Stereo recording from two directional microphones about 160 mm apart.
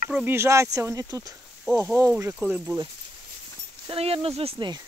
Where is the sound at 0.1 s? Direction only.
10° right (ahead or behind).